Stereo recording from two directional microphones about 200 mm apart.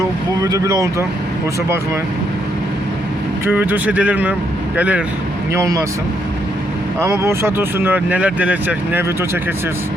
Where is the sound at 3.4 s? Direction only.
10° right (ahead or behind).